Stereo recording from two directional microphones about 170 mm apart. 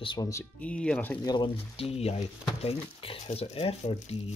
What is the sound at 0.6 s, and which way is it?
Speech, 5° left (ahead or behind).